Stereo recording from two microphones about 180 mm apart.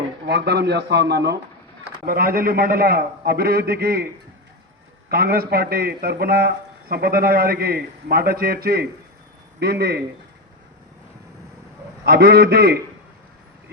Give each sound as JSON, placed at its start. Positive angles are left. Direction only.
{"t": 0.3, "sound": "a man's voice", "side_deg": -65}
{"t": 2.0, "sound": "a man's voice", "side_deg": -55}
{"t": 5.0, "sound": "a man's voice", "side_deg": -60}
{"t": 12.0, "sound": "a man's voice", "side_deg": -60}